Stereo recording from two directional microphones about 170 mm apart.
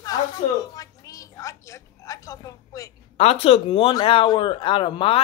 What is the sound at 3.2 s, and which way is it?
Speech, 35° left (ahead or behind).